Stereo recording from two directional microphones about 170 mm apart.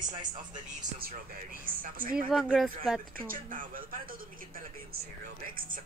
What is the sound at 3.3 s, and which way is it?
Speech, 55° right (ahead or behind).